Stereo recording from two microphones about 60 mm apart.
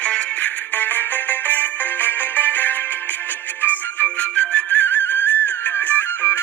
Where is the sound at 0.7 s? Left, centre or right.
Left.